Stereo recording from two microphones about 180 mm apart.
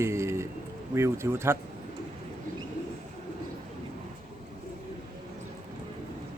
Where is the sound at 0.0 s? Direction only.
15° right (ahead or behind).